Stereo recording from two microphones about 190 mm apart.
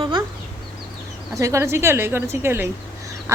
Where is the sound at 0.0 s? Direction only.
25° right (ahead or behind).